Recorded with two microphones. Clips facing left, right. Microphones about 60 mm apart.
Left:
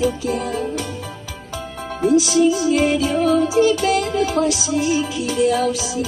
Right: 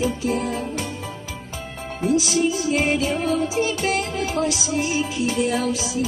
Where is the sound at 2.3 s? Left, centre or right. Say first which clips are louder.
Left 6 dB; left.